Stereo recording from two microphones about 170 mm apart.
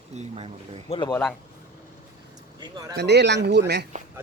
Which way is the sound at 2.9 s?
85° right.